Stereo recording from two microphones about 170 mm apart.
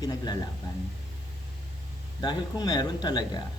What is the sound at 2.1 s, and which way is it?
Speech, 25° left (ahead or behind).